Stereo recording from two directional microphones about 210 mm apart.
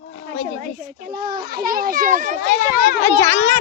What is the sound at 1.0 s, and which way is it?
A child's voice, 45° right (ahead or behind).